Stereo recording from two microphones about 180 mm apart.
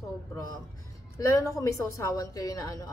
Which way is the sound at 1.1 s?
15° left (ahead or behind).